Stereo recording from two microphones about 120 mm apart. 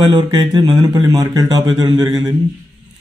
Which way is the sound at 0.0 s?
40° right (ahead or behind).